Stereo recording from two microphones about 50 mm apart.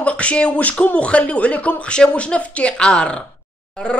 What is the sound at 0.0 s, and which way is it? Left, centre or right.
Beatboxing, left.